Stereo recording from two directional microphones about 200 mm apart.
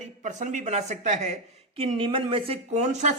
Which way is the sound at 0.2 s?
40° right (ahead or behind).